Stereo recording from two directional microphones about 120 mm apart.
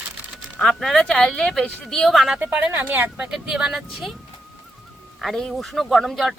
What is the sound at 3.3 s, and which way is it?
Speech, 5° right (ahead or behind).